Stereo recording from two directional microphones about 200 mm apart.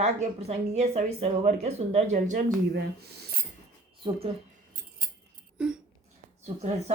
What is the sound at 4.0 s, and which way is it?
Speech, 30° right (ahead or behind).